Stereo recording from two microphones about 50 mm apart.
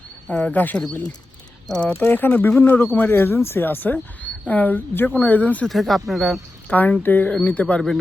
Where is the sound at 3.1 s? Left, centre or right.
Left.